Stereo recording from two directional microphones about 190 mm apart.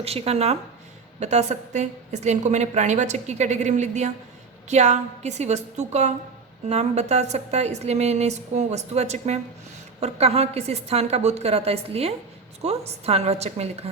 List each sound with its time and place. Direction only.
0.0 s a woman's voice: 35° right (ahead or behind)